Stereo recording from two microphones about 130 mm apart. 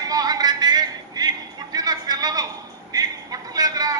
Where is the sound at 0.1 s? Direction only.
30° right (ahead or behind).